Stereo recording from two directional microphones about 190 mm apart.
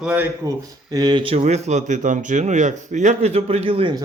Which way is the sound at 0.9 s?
20° right (ahead or behind).